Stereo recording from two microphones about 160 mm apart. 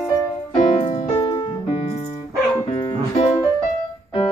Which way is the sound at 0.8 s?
35° left (ahead or behind).